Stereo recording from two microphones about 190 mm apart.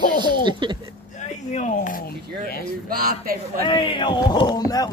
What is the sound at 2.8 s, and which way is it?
Speech, 50° right (ahead or behind).